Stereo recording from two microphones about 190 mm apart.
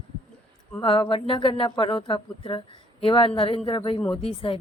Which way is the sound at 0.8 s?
30° left (ahead or behind).